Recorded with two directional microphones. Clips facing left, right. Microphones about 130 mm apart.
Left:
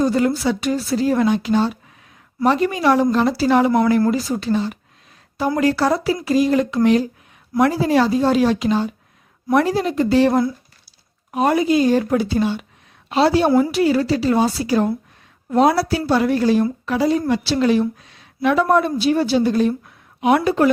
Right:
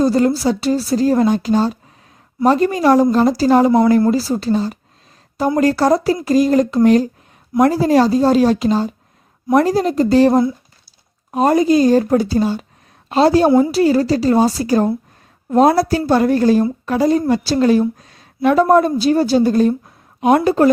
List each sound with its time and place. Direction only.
0.0 s a woman's voice: 35° right (ahead or behind)